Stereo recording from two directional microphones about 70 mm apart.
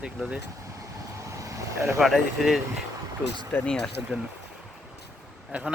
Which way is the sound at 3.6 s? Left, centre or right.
Centre.